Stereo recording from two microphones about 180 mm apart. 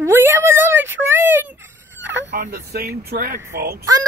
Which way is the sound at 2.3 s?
50° right (ahead or behind).